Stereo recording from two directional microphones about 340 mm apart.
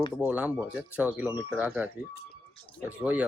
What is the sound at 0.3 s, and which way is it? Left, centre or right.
Speech, centre.